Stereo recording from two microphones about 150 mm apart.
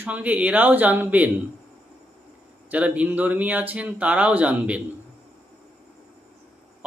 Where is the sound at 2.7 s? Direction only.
10° right (ahead or behind).